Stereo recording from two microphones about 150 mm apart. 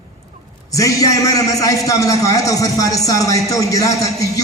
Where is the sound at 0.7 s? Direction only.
20° left (ahead or behind).